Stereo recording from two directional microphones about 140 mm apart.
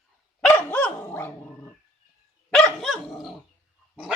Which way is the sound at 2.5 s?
Centre (ahead or behind).